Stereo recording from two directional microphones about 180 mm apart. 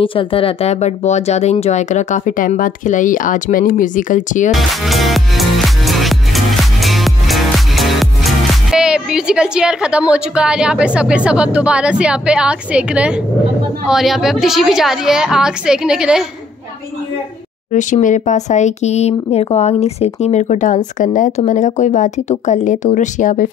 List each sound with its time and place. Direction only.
0.0 s speech: 30° left (ahead or behind); by 4.5 s 45° left (ahead or behind)
4.5 s music: centre (ahead or behind)
13.8 s a woman's voice: centre (ahead or behind)
17.7 s speech: 45° left (ahead or behind)